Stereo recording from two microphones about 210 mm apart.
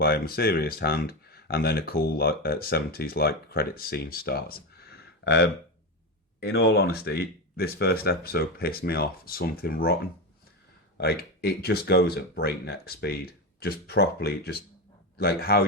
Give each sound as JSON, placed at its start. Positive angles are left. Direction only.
{"t": 0.0, "sound": "speech", "side_deg": 50}
{"t": 10.9, "sound": "speech", "side_deg": 50}